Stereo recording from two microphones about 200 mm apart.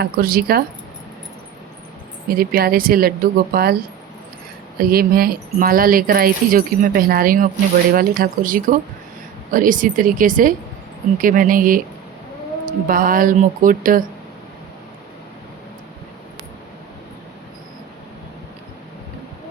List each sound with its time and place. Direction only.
0.0 s speech: 50° right (ahead or behind)
2.3 s speech: 50° right (ahead or behind)
4.8 s speech: 50° right (ahead or behind)